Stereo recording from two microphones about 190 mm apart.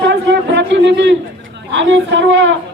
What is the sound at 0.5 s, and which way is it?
A woman's voice, 65° right (ahead or behind).